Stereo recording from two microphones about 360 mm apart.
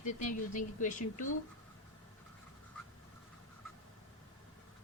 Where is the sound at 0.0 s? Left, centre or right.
Left.